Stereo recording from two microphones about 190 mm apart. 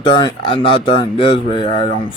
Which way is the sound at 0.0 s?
25° left (ahead or behind).